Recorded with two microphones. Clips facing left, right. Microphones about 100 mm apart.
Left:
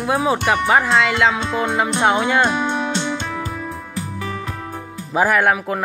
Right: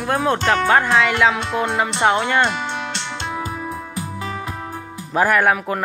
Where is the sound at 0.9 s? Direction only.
Centre (ahead or behind).